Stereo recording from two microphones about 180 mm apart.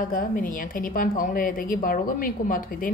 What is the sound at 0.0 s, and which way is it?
A woman's voice, 50° left (ahead or behind).